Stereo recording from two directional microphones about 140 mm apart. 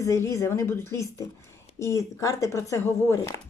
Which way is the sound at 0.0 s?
20° left (ahead or behind).